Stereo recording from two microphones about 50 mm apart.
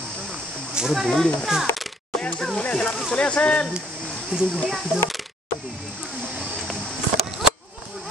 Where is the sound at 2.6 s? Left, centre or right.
Left.